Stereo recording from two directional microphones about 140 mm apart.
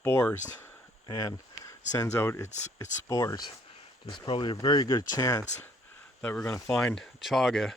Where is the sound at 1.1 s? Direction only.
25° left (ahead or behind).